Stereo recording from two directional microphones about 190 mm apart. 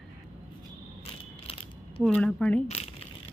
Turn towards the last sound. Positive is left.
turn(degrees=35)  # may be behind; listen again after turning